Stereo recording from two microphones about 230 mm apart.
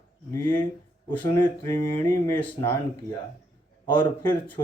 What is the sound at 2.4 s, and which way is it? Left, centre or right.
Speech, left.